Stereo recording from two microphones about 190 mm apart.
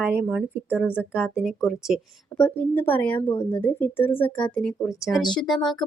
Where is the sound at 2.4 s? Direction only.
10° left (ahead or behind).